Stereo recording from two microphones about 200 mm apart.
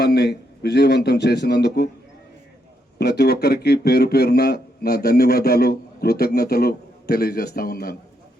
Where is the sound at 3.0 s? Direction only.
55° left (ahead or behind).